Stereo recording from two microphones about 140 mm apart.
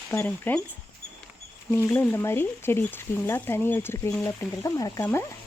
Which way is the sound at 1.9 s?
15° left (ahead or behind).